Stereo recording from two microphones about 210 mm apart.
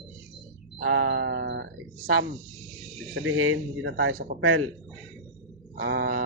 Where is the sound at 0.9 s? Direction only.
55° right (ahead or behind).